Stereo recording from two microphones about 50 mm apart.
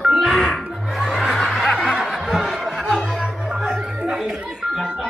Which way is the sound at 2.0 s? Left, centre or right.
Centre.